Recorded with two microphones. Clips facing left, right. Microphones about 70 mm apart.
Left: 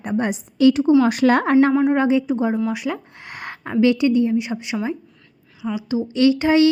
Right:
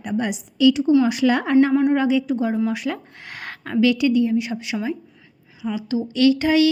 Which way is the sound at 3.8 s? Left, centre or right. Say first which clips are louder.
Left 1 dB; left.